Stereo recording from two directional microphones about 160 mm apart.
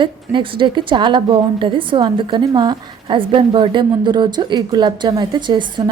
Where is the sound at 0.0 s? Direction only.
30° right (ahead or behind).